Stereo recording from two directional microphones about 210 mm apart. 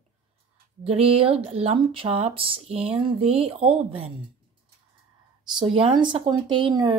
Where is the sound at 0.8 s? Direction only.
30° right (ahead or behind).